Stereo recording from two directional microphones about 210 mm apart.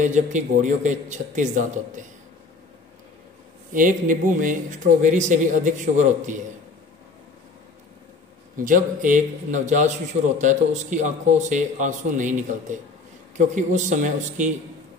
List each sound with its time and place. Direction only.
0.0 s speech: 35° right (ahead or behind)
3.7 s speech: 40° right (ahead or behind)
8.5 s speech: 40° right (ahead or behind)